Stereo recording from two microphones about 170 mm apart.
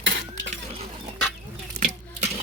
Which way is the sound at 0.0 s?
90° right.